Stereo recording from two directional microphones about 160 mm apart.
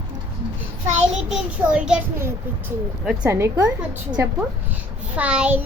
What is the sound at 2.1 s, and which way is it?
Child singing, 15° right (ahead or behind).